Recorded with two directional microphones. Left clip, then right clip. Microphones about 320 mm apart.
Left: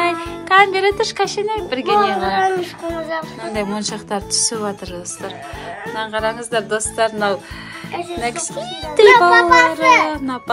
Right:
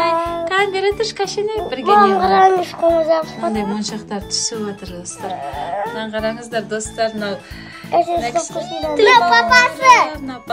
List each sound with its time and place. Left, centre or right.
0.5 s a child's voice: centre
2.3 s music: centre
3.5 s a child's voice: centre
5.9 s a child's voice: centre